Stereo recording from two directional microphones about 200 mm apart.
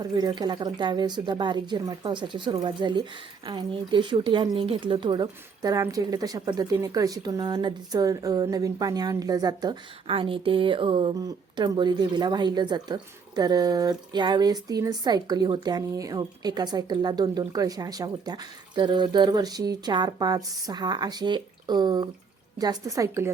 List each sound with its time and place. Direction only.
0.0 s a woman's voice: 20° right (ahead or behind)